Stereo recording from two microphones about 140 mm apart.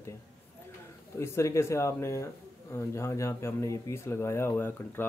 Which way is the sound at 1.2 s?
20° left (ahead or behind).